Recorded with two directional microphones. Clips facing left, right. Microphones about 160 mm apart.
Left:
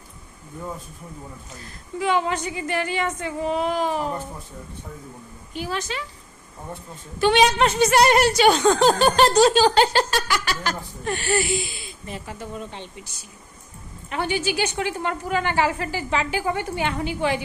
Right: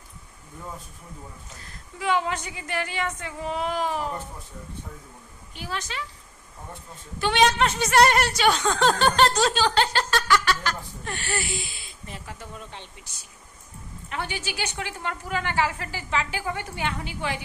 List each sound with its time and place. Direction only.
2.0 s a woman's voice: centre (ahead or behind)
5.5 s speech: 5° left (ahead or behind)
7.2 s a woman's voice: 5° left (ahead or behind)
8.5 s a sound: 35° left (ahead or behind)
9.0 s speech: 5° left (ahead or behind)
14.1 s a woman's voice: 15° left (ahead or behind)